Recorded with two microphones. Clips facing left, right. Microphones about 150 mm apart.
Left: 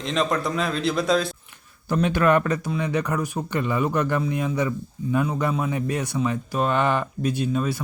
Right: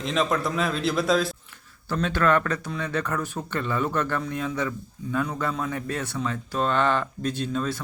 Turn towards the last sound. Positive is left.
turn(degrees=10)  # may be behind; listen again after turning